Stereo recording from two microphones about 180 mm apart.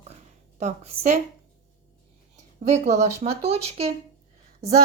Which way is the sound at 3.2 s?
35° right (ahead or behind).